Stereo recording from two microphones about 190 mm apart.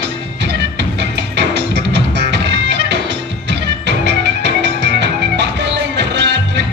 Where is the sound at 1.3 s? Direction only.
65° right (ahead or behind).